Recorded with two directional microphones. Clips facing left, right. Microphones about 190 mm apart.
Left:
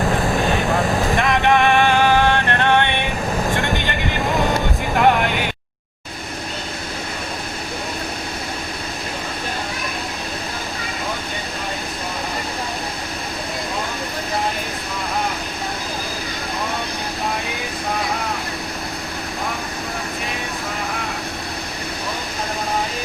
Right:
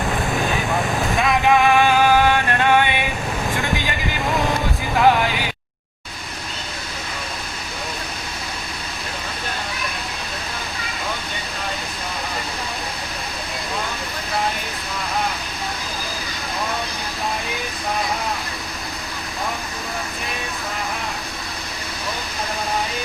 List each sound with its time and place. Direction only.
1.1 s vehicle: 5° right (ahead or behind)
4.9 s vehicle: centre (ahead or behind)